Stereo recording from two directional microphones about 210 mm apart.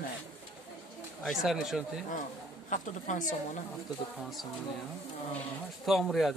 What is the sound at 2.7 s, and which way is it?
Speech, 35° left (ahead or behind).